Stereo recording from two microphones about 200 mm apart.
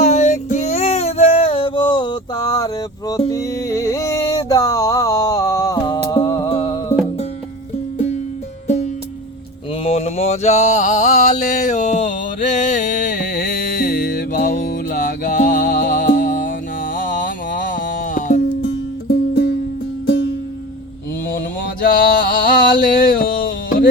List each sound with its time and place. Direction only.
0.0 s music: 35° left (ahead or behind)
8.6 s music: 35° left (ahead or behind)
9.8 s a sound: 30° left (ahead or behind)
17.0 s music: 40° left (ahead or behind)
19.3 s music: 60° left (ahead or behind)
21.3 s a sound: 45° left (ahead or behind)